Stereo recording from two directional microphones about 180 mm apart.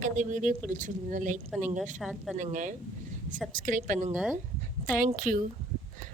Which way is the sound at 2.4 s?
45° right (ahead or behind).